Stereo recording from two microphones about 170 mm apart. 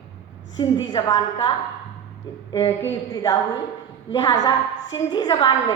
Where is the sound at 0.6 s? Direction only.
25° left (ahead or behind).